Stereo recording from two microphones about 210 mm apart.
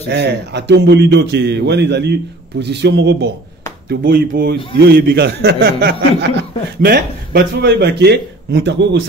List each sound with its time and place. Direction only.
0.1 s a man's voice: 55° right (ahead or behind)
3.9 s a man's voice: 45° right (ahead or behind)